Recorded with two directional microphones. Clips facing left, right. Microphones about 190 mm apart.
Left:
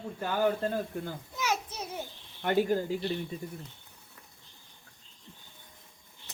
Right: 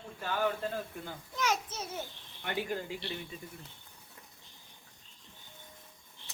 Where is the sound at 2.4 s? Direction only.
45° left (ahead or behind).